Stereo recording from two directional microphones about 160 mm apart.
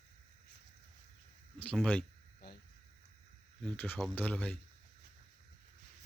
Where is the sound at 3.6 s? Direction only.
10° left (ahead or behind).